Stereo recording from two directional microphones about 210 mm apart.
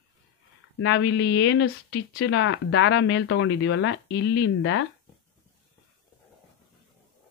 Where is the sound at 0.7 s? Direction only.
60° left (ahead or behind).